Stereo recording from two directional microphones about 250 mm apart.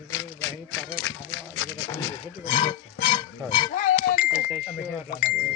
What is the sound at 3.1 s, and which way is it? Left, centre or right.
Goat, left.